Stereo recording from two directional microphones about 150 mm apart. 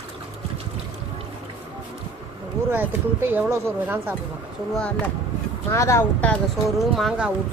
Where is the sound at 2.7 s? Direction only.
15° right (ahead or behind).